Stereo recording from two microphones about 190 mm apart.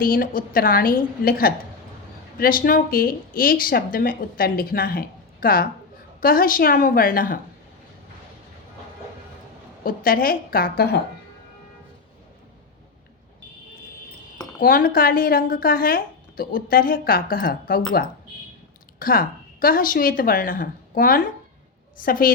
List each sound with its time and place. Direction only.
0.0 s a woman's voice: 50° left (ahead or behind)
9.8 s a woman's voice: 50° left (ahead or behind)
14.6 s a woman's voice: 50° left (ahead or behind)